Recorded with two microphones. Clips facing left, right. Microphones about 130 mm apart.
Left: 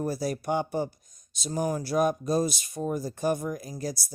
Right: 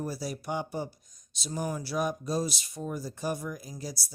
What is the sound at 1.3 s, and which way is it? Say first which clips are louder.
Speech: left 5 dB; 45° left (ahead or behind).